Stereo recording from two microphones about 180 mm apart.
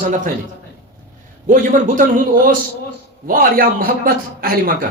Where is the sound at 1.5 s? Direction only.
45° right (ahead or behind).